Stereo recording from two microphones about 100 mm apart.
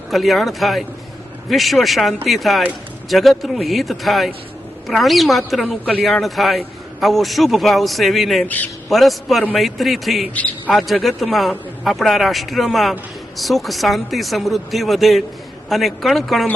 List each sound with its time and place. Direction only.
0.1 s a man's voice: centre (ahead or behind)
8.4 s a man's voice: 15° left (ahead or behind)
8.9 s a man's voice: centre (ahead or behind)